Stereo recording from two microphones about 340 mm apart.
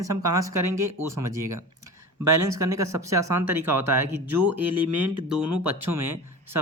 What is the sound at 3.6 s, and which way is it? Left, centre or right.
Speech, right.